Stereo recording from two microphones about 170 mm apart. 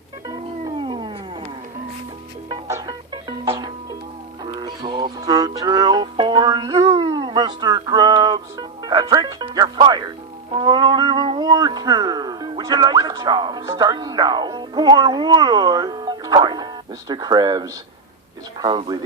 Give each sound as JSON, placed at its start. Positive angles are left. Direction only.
{"t": 0.3, "sound": "music", "side_deg": -25}
{"t": 2.5, "sound": "music", "side_deg": -20}
{"t": 10.5, "sound": "speech", "side_deg": -25}